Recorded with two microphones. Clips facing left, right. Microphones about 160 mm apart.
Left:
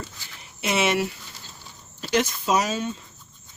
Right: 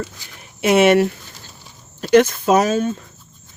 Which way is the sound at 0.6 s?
55° right (ahead or behind).